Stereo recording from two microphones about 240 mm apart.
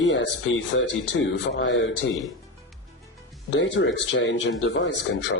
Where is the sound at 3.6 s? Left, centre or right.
Left.